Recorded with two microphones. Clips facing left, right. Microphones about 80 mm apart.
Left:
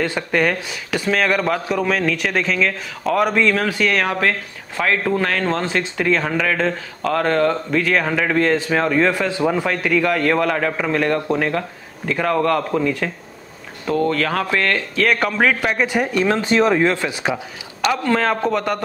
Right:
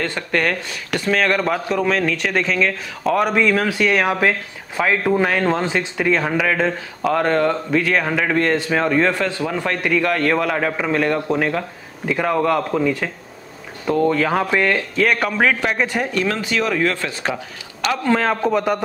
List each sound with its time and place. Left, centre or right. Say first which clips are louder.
0.0 s speech: left 2 dB; centre
15.0 s speech: left 1 dB; centre
16.3 s speech: left 4 dB; left
18.0 s speech: right 3 dB; centre